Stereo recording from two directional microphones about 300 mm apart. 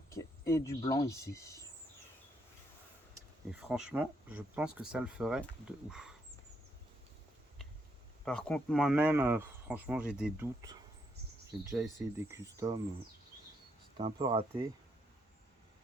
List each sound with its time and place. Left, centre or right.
0.1 s speech: centre
3.7 s speech: centre
8.2 s speech: centre
13.9 s speech: centre